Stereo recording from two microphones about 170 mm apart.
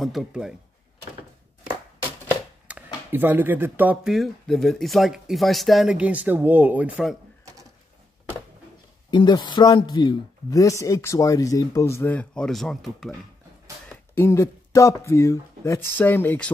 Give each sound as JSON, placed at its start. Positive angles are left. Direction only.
{"t": 0.0, "sound": "speech", "side_deg": 0}
{"t": 2.7, "sound": "speech", "side_deg": -10}
{"t": 9.1, "sound": "speech", "side_deg": 25}
{"t": 14.1, "sound": "speech", "side_deg": 15}